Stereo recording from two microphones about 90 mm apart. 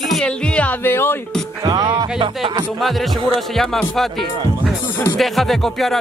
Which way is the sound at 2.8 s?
Centre (ahead or behind).